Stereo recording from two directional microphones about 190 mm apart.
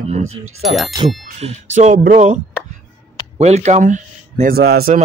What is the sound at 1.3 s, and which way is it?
Speech, 35° right (ahead or behind).